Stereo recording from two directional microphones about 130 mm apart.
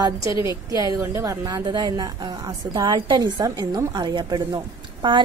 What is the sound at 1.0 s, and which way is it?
A woman's voice, 20° right (ahead or behind).